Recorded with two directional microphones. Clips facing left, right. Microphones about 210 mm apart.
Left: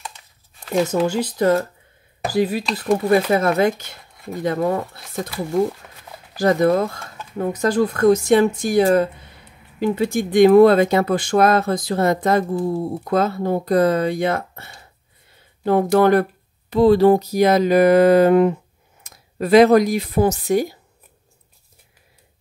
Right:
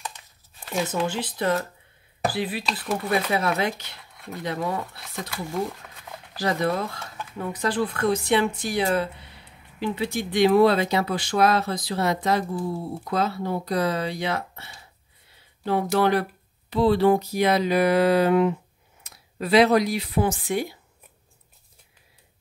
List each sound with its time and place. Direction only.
0.8 s speech: 40° left (ahead or behind)
6.3 s speech: 45° left (ahead or behind)